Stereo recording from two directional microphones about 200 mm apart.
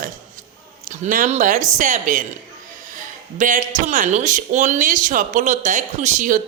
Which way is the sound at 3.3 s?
40° right (ahead or behind).